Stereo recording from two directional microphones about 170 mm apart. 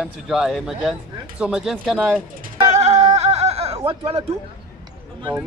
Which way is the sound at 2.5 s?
40° right (ahead or behind).